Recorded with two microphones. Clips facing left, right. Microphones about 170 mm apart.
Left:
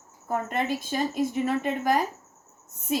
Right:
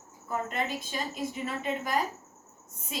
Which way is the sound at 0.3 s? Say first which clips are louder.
Left 5 dB; 55° left (ahead or behind).